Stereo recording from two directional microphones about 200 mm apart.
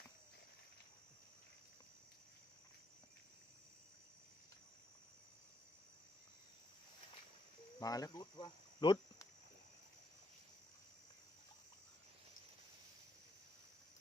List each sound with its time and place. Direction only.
7.8 s speech: 20° left (ahead or behind)